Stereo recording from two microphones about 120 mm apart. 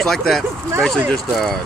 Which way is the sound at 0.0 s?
5° left (ahead or behind).